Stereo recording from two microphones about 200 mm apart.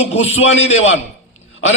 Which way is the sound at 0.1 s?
30° left (ahead or behind).